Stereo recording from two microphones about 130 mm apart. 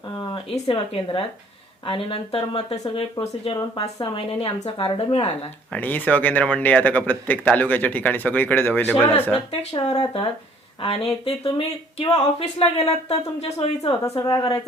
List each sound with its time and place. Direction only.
0.7 s speech: 40° left (ahead or behind)
3.8 s speech: 35° left (ahead or behind); by 5.5 s 50° left (ahead or behind)
5.7 s speech: 15° left (ahead or behind)
9.5 s speech: 55° left (ahead or behind)
14.2 s speech: 30° left (ahead or behind)